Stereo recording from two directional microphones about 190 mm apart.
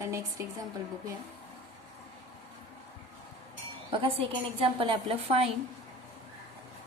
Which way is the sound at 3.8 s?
30° right (ahead or behind).